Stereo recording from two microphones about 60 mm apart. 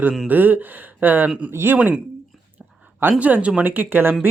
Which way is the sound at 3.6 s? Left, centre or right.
Right.